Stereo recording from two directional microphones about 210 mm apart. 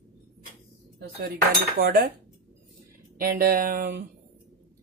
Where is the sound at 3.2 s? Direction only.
45° right (ahead or behind).